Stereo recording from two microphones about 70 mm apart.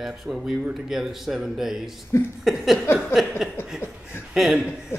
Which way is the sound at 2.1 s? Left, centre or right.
Left.